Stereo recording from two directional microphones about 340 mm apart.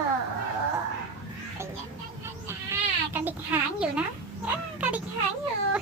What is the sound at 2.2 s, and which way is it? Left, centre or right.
Goat, centre.